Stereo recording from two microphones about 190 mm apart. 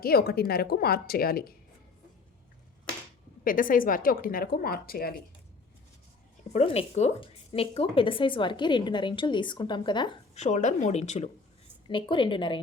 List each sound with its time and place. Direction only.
0.0 s a woman's voice: 55° left (ahead or behind)
3.4 s a woman's voice: 45° left (ahead or behind)
6.5 s speech: 35° left (ahead or behind)
10.3 s speech: 40° left (ahead or behind)
11.9 s speech: 25° left (ahead or behind)